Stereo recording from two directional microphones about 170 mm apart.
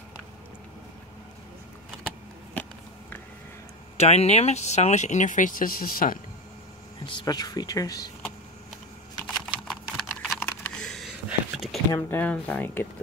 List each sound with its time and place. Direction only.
3.9 s speech: 40° left (ahead or behind); by 6.1 s 55° left (ahead or behind)
7.1 s speech: 25° left (ahead or behind)
9.3 s typing: centre (ahead or behind)
11.2 s a sound: centre (ahead or behind)
11.9 s speech: 15° left (ahead or behind)